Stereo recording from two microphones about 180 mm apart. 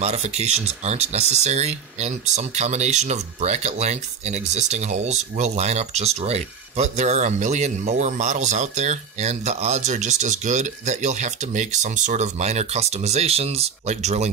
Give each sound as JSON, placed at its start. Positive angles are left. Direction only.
{"t": 0.0, "sound": "speech", "side_deg": -35}